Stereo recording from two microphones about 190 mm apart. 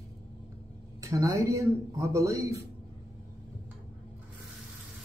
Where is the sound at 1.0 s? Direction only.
15° right (ahead or behind).